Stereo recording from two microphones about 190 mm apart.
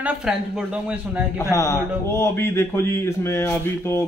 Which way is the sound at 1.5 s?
15° left (ahead or behind).